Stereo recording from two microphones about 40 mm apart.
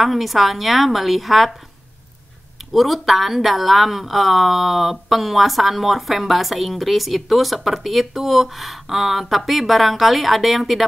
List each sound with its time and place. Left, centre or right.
0.0 s speech: centre
2.7 s speech: centre